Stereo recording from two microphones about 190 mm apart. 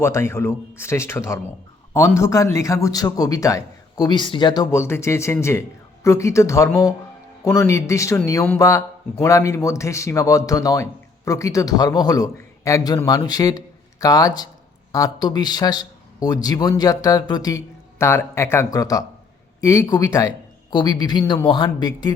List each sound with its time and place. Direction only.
0.0 s a man's voice: 15° left (ahead or behind)